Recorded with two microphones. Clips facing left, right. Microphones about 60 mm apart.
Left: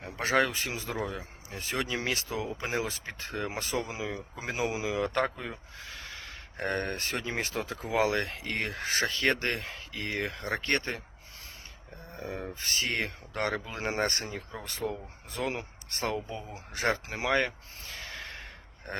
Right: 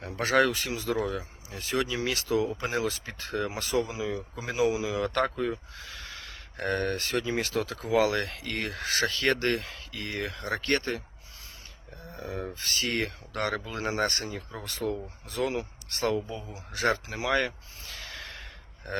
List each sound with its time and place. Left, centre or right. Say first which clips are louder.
0.0 s speech: right 3 dB; centre; by 2.1 s left
2.1 s speech: right 7 dB; left
4.9 s speech: right 2 dB; centre
12.1 s speech: right 2 dB; left
17.3 s a sound: right 1 dB; left